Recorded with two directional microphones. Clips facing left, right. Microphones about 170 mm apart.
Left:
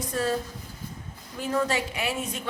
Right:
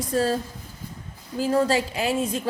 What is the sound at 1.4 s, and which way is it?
A woman's voice, 35° right (ahead or behind).